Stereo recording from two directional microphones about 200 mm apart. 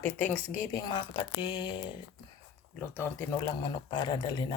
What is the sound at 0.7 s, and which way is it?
Speech, 20° left (ahead or behind).